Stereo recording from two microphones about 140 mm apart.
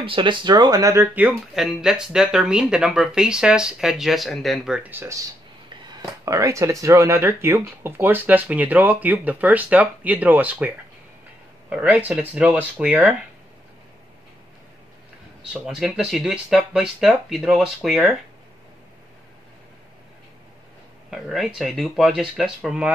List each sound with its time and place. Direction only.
0.0 s speech: 35° right (ahead or behind)
1.1 s speech: 5° right (ahead or behind)
6.2 s speech: 20° right (ahead or behind)
11.7 s speech: 10° right (ahead or behind)
15.6 s speech: 5° right (ahead or behind)
21.1 s speech: centre (ahead or behind)